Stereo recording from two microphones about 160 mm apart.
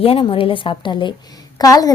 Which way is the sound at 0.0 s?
35° left (ahead or behind).